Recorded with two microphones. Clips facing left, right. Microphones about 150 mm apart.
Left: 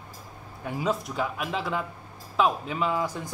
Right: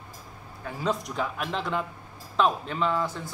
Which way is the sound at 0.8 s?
5° left (ahead or behind).